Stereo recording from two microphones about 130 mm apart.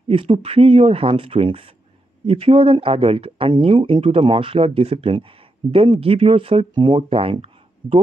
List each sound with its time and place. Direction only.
0.1 s speech: 45° right (ahead or behind)